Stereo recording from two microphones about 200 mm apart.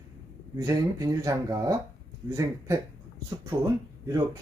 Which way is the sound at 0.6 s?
15° right (ahead or behind).